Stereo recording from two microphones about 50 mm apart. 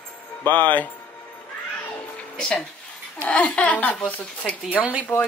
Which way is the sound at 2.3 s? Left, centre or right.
Centre.